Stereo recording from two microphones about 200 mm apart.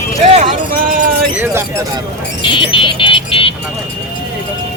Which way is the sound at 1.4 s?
10° right (ahead or behind).